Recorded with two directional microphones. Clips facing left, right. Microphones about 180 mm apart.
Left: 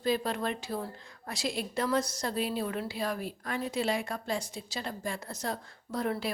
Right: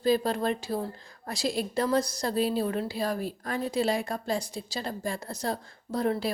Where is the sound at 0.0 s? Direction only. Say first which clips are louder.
Right 5 dB; 35° right (ahead or behind).